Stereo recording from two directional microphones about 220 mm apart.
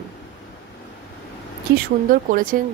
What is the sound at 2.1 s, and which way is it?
Speech, 40° right (ahead or behind).